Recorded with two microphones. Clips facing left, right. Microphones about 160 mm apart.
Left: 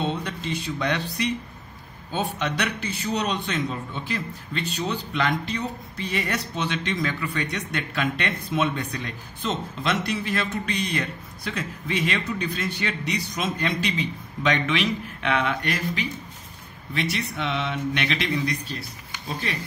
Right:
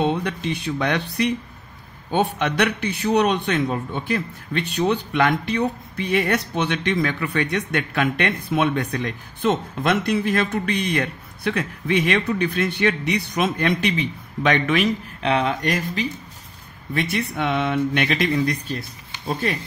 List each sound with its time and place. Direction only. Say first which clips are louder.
0.0 s a man's voice: right 6 dB; 60° right (ahead or behind)
15.2 s speech: right 4 dB; 35° right (ahead or behind)
16.9 s speech: right 4 dB; 50° right (ahead or behind)